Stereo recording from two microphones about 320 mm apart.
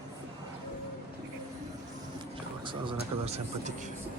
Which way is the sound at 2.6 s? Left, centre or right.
Centre.